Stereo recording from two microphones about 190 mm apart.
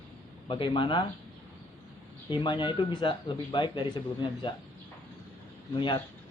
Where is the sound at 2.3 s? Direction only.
25° left (ahead or behind).